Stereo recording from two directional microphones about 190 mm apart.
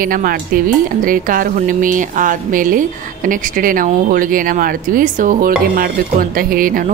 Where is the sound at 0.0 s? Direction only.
50° right (ahead or behind).